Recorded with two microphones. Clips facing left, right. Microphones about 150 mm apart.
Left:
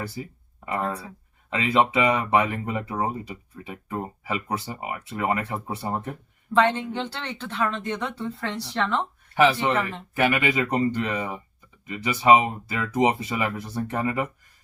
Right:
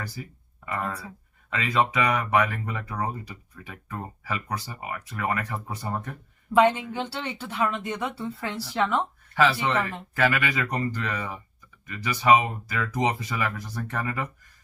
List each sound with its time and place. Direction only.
0.0 s speech: 25° left (ahead or behind)
6.5 s speech: 10° right (ahead or behind)
9.3 s speech: 15° left (ahead or behind)